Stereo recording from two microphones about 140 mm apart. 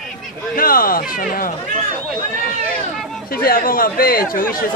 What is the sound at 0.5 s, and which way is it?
Speech, 90° left.